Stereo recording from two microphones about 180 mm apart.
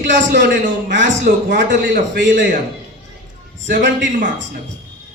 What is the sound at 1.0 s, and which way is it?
A man's voice, 50° right (ahead or behind).